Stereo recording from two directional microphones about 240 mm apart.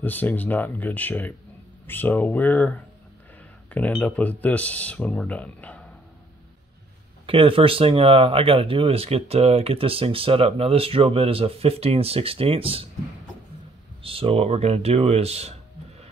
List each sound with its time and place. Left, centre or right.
0.0 s speech: centre
7.2 s speech: right
14.0 s speech: right